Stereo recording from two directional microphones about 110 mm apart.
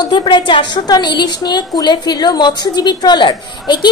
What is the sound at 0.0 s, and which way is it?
A woman's voice, 45° left (ahead or behind).